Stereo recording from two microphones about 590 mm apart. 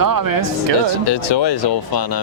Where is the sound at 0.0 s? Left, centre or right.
Right.